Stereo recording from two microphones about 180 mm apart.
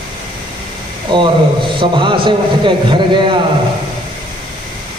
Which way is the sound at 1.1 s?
25° right (ahead or behind).